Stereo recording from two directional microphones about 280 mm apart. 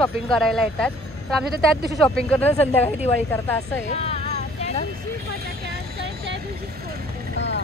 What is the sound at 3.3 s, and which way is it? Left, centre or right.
Speech, centre.